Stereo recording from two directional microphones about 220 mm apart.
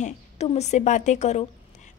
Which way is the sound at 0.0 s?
30° left (ahead or behind).